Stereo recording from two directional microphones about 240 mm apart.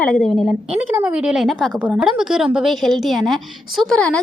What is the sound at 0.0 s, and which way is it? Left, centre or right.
A woman's voice, centre.